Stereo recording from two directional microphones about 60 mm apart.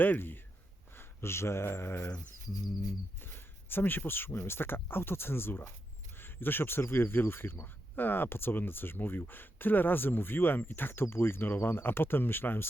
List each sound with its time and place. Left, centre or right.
0.0 s speech: left
0.9 s speech: left
3.2 s speech: left